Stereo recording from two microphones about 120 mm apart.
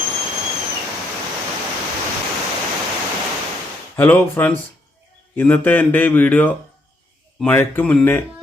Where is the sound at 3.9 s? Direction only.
20° left (ahead or behind).